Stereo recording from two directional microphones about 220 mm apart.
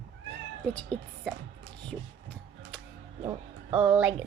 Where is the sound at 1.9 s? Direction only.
5° left (ahead or behind).